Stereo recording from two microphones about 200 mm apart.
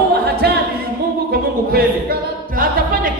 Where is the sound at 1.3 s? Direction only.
50° right (ahead or behind).